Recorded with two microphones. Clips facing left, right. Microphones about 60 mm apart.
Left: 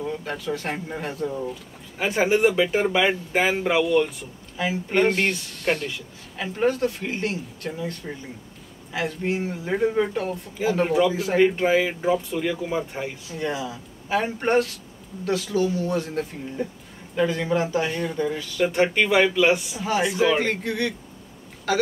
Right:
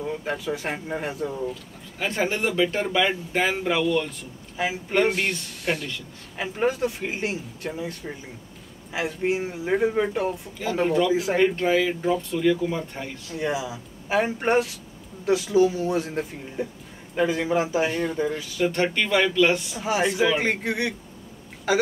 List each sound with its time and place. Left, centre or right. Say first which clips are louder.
0.0 s speech: right 1 dB; centre
2.0 s speech: left 5 dB; centre
10.6 s speech: left 2 dB; centre
13.4 s speech: right 1 dB; centre
18.6 s speech: left 3 dB; centre
19.8 s speech: right 3 dB; centre